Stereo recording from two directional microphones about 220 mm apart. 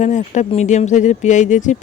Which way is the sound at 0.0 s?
35° left (ahead or behind).